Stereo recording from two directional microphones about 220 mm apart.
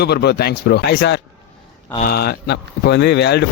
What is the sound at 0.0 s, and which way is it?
Speech, 50° left (ahead or behind).